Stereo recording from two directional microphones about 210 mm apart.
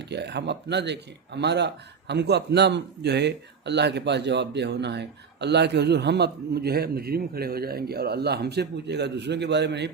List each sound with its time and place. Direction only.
0.1 s speech: 55° right (ahead or behind)